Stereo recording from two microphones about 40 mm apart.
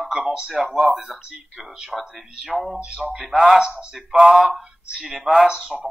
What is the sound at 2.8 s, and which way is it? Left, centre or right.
Speech, centre.